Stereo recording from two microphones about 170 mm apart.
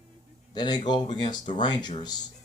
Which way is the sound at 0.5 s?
25° left (ahead or behind).